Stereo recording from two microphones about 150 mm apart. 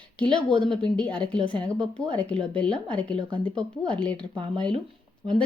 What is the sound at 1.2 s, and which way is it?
Speech, 10° left (ahead or behind).